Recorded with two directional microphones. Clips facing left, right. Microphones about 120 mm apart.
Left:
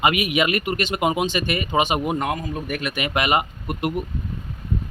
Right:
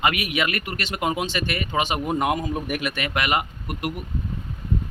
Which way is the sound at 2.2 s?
15° right (ahead or behind).